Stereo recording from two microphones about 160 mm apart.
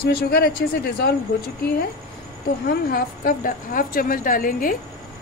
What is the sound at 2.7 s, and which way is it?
A woman's voice, 70° left (ahead or behind).